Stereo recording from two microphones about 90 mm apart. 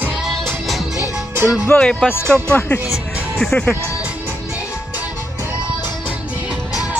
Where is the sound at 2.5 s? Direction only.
20° left (ahead or behind).